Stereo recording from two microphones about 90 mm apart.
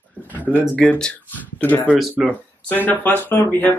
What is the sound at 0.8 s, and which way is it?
Speech, 10° left (ahead or behind).